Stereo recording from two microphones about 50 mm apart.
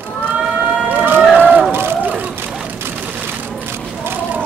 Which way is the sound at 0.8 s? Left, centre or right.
Right.